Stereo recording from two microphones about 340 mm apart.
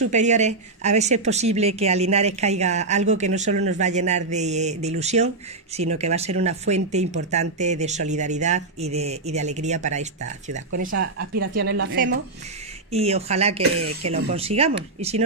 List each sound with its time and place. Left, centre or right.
0.1 s a woman's voice: right
10.9 s a woman's voice: right
12.9 s speech: centre
13.6 s speech: right
14.0 s speech: centre